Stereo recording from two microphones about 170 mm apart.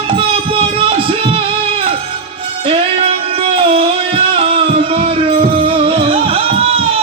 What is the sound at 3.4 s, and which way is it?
Music, 35° right (ahead or behind).